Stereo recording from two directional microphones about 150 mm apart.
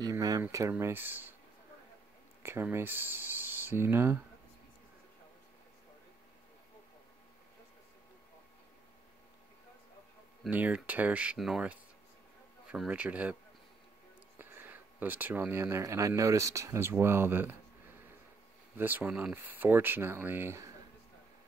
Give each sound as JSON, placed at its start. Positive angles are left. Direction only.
{"t": 0.0, "sound": "speech", "side_deg": -25}
{"t": 2.4, "sound": "speech", "side_deg": -15}
{"t": 10.5, "sound": "speech", "side_deg": -10}
{"t": 14.4, "sound": "speech", "side_deg": -15}
{"t": 18.8, "sound": "speech", "side_deg": -10}